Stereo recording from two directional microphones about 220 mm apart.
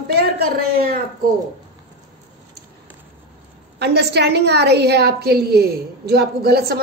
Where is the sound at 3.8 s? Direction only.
50° right (ahead or behind).